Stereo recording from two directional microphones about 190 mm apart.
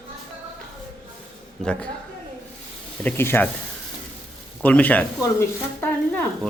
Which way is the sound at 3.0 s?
10° left (ahead or behind).